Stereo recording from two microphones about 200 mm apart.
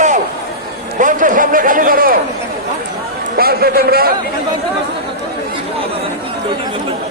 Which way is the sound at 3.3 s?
50° right (ahead or behind).